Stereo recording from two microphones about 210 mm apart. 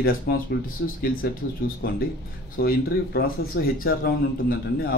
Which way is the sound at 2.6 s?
45° left (ahead or behind).